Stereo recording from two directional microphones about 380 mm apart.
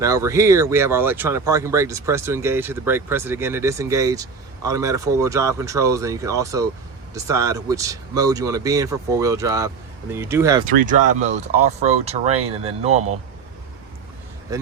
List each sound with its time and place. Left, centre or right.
0.0 s speech: centre
11.2 s speech: centre
14.5 s speech: centre